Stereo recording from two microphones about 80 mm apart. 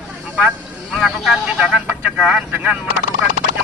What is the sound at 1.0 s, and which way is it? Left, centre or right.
Speech, centre.